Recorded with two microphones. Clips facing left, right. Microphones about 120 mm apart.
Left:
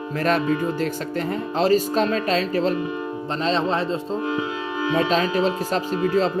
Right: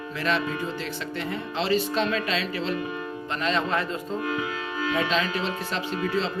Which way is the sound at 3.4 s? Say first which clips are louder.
Left 4 dB; 30° left (ahead or behind).